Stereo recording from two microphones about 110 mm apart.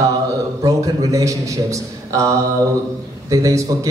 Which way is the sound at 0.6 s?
30° right (ahead or behind).